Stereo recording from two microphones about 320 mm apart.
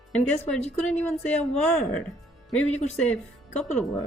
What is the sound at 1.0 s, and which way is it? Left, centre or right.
Speech, centre.